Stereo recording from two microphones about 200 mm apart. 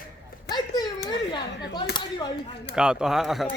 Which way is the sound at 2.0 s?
25° left (ahead or behind).